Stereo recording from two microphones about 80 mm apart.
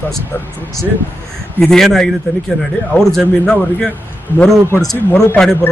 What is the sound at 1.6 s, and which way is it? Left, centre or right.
Speech, centre.